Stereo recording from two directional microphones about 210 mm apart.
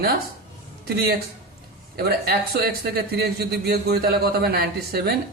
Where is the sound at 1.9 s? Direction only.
45° right (ahead or behind).